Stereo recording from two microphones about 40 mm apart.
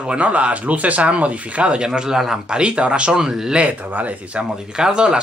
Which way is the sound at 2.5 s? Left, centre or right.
Right.